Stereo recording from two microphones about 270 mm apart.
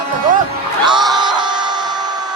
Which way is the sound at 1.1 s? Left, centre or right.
Centre.